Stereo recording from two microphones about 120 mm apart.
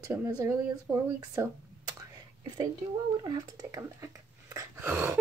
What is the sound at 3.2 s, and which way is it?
Speech, 30° right (ahead or behind).